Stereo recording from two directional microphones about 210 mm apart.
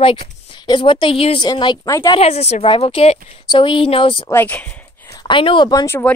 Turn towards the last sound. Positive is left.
turn(degrees=10)  # may be behind; listen again after turning